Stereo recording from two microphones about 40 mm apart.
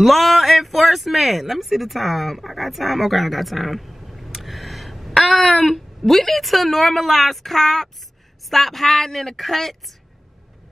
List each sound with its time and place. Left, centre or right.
0.0 s a woman's voice: centre